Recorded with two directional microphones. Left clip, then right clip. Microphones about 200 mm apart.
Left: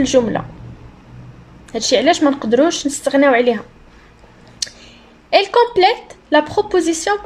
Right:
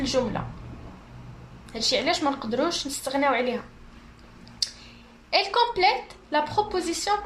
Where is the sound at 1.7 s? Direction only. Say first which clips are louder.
Left 10 dB; 45° left (ahead or behind).